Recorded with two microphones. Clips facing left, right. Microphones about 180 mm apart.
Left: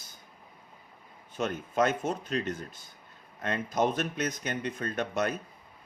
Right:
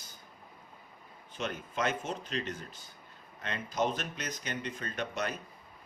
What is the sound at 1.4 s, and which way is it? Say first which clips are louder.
Speech: left 6 dB; 45° left (ahead or behind).